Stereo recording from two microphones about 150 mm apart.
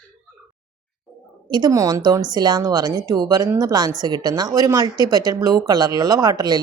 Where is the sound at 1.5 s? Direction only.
30° right (ahead or behind).